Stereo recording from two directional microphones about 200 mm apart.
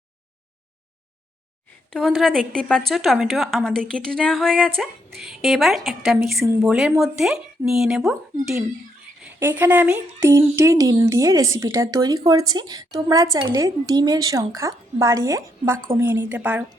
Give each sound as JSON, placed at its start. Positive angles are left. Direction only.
{"t": 1.9, "sound": "a woman's voice", "side_deg": 0}